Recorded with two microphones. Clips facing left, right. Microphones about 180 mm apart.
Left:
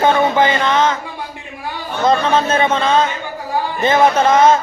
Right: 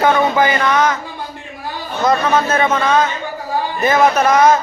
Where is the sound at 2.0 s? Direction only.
25° left (ahead or behind).